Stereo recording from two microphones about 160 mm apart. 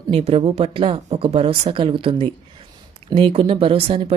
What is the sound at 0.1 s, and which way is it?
A woman's voice, 40° right (ahead or behind).